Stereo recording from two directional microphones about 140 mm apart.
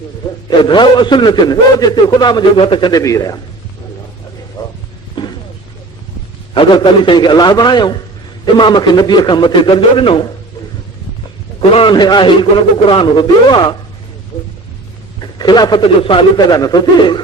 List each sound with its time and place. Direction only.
0.6 s a man's voice: 35° left (ahead or behind)
3.0 s speech: 25° left (ahead or behind)
4.6 s a sound: 30° left (ahead or behind)
5.2 s vehicle: 35° left (ahead or behind)
6.5 s a man's voice: 35° left (ahead or behind)
11.7 s a man's voice: 35° left (ahead or behind)
15.2 s a man's voice: 30° left (ahead or behind)